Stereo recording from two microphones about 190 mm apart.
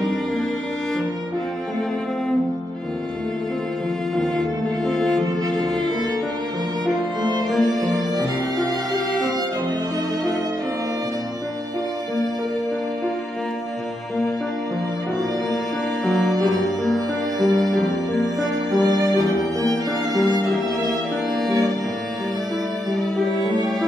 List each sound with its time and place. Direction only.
4.2 s music: 5° left (ahead or behind)
6.9 s music: 20° right (ahead or behind)
7.5 s music: centre (ahead or behind)
16.1 s music: centre (ahead or behind)
21.4 s music: centre (ahead or behind)
22.9 s music: centre (ahead or behind)